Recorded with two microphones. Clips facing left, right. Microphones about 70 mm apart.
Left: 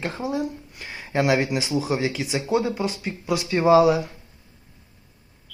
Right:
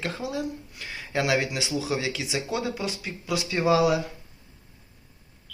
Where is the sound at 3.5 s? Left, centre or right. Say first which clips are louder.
Left 6 dB; left.